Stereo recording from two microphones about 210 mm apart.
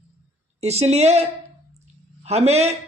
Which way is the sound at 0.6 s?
30° right (ahead or behind).